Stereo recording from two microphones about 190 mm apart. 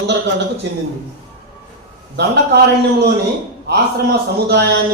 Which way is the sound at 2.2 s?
60° right (ahead or behind).